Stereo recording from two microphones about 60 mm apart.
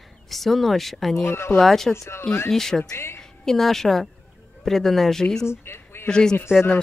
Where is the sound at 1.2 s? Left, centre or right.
Left.